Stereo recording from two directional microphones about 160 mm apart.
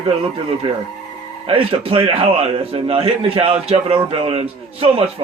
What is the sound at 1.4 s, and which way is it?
A man's voice, 35° right (ahead or behind).